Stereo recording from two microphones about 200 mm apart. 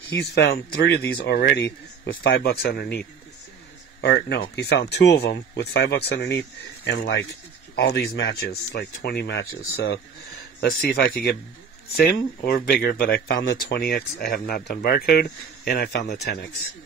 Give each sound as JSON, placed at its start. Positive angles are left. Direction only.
{"t": 0.1, "sound": "speech", "side_deg": 55}
{"t": 10.6, "sound": "speech", "side_deg": 50}